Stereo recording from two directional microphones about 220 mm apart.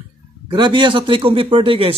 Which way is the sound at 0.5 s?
20° right (ahead or behind).